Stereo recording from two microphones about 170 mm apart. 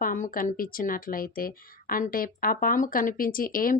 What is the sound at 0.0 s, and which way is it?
Speech, 55° left (ahead or behind).